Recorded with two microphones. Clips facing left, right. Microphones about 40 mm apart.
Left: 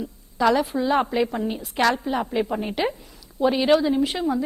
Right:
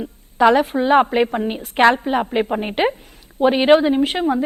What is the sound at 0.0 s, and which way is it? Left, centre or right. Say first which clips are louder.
A woman's voice: right 6 dB; right.